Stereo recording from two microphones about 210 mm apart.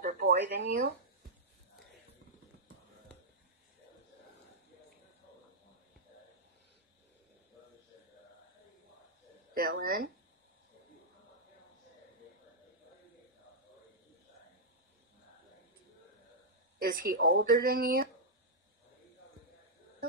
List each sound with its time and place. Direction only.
0.0 s a sound: 45° right (ahead or behind)
9.5 s speech: 45° right (ahead or behind)
16.7 s speech: 45° right (ahead or behind)